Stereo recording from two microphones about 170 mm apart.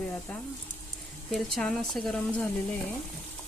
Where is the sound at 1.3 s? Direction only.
Centre (ahead or behind).